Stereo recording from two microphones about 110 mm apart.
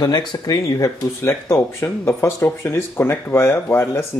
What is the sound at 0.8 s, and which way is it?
Speech, 30° left (ahead or behind).